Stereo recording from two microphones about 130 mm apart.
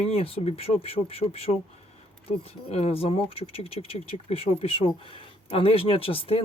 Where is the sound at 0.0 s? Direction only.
50° left (ahead or behind).